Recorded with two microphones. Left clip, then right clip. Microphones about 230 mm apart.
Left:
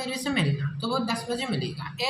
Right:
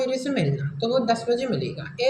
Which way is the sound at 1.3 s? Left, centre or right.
Left.